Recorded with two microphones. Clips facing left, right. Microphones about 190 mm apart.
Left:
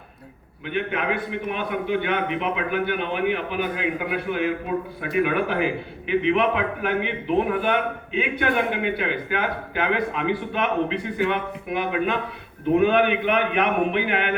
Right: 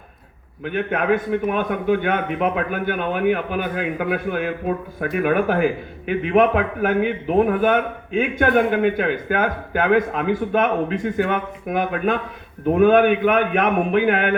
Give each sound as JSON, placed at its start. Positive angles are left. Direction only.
{"t": 0.6, "sound": "a man's voice", "side_deg": -45}